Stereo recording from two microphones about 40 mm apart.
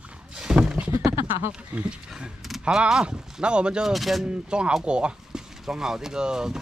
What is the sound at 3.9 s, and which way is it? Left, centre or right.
Speech, centre.